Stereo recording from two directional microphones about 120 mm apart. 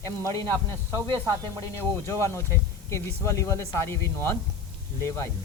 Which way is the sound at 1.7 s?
20° left (ahead or behind).